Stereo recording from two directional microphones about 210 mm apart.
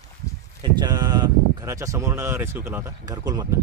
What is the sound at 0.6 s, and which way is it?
Speech, 20° right (ahead or behind).